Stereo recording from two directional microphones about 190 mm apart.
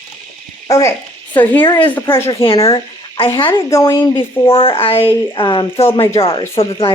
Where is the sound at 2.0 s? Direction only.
10° left (ahead or behind).